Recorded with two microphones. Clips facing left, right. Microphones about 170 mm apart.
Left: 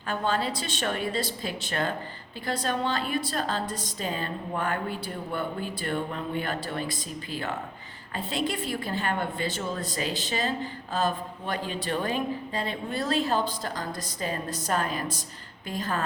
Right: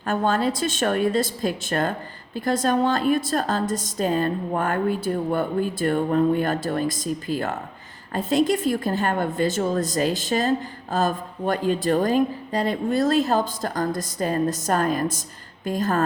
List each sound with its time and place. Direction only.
0.0 s a woman's voice: 45° right (ahead or behind)